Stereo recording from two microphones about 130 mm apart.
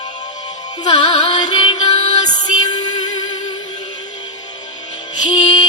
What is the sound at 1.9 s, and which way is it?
Music, 60° left (ahead or behind).